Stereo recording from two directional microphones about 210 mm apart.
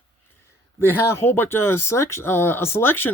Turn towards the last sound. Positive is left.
turn(degrees=10)  # may be behind; listen again after turning